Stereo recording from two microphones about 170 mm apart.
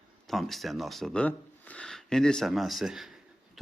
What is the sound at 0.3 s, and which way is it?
Speech, centre (ahead or behind).